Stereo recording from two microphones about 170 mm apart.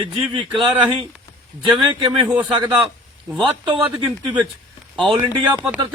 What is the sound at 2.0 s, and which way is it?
Speech, 30° right (ahead or behind).